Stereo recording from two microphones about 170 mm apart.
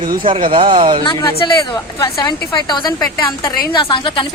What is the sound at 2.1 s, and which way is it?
A woman's voice, 25° left (ahead or behind).